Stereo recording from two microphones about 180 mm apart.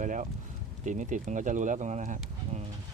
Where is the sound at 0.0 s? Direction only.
45° right (ahead or behind).